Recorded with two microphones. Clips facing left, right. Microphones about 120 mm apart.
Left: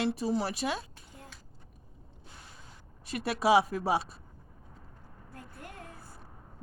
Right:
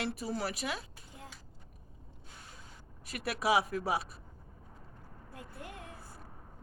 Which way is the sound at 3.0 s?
25° left (ahead or behind).